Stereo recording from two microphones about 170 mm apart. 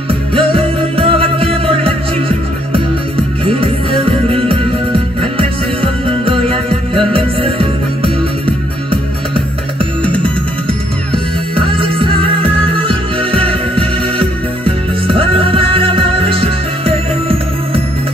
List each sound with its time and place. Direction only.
0.3 s music: 30° right (ahead or behind)
3.4 s music: 35° right (ahead or behind)
11.5 s music: 30° right (ahead or behind)